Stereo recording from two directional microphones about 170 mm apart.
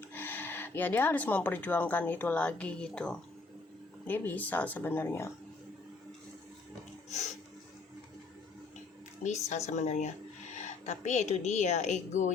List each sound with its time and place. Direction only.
0.1 s speech: 10° left (ahead or behind)
9.2 s speech: 45° left (ahead or behind)